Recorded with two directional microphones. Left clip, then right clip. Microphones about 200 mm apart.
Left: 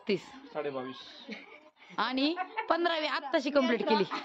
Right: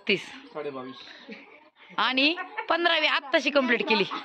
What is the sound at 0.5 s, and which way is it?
Speech, 20° left (ahead or behind).